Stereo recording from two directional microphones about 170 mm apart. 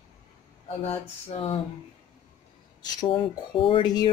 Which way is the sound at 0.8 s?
40° left (ahead or behind).